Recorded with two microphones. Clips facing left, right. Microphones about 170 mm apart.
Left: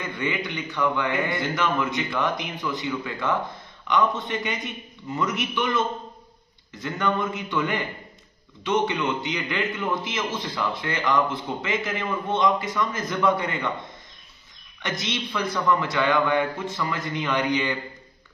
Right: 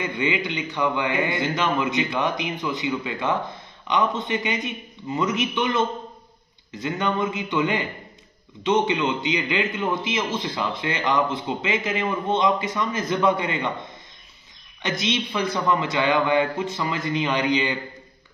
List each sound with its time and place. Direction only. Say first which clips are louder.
0.0 s a man's voice: right 4 dB; 20° right (ahead or behind)
6.8 s a man's voice: right 1 dB; 20° right (ahead or behind)
14.9 s a man's voice: right 4 dB; 20° right (ahead or behind)